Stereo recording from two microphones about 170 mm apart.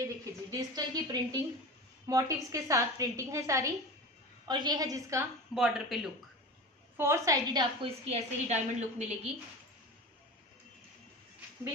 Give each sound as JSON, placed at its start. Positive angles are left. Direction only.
{"t": 0.5, "sound": "a woman's voice", "side_deg": -20}
{"t": 5.5, "sound": "speech", "side_deg": 0}
{"t": 7.0, "sound": "a woman's voice", "side_deg": -15}
{"t": 7.8, "sound": "a woman's voice", "side_deg": -40}